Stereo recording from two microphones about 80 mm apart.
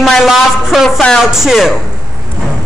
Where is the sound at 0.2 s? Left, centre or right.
Centre.